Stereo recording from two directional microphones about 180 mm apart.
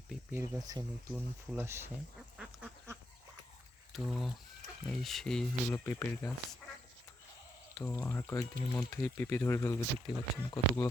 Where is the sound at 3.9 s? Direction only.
Centre (ahead or behind).